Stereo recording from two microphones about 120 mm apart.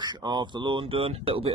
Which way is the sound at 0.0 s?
35° right (ahead or behind).